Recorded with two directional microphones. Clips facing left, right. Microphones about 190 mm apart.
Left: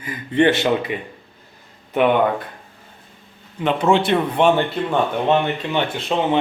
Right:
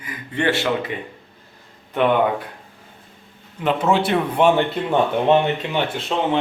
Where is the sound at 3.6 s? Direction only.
5° right (ahead or behind).